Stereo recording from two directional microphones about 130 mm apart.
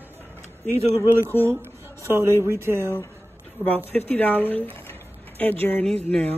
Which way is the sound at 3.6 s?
15° left (ahead or behind).